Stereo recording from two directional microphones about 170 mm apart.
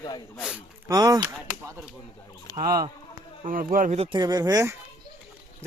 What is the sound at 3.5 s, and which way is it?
Speech, 55° right (ahead or behind).